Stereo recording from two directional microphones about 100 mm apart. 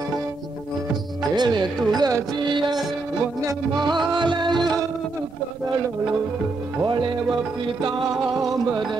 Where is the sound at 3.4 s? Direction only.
45° right (ahead or behind).